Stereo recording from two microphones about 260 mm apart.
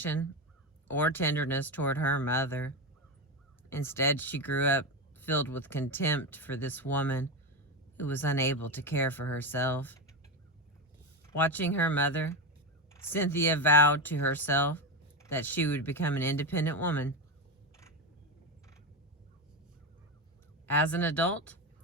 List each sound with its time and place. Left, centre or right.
0.0 s speech: centre
11.3 s speech: centre
20.7 s speech: centre